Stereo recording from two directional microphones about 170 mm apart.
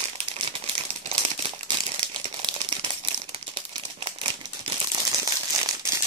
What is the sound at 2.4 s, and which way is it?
Crumpling, 30° right (ahead or behind).